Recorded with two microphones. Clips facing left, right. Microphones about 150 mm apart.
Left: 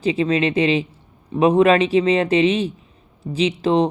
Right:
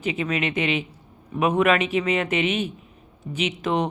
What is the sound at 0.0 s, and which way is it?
Speech, 35° left (ahead or behind).